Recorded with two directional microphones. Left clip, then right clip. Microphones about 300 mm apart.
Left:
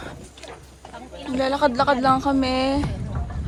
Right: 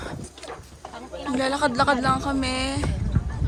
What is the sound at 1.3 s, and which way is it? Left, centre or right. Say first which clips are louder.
A woman's voice: left 3 dB; centre.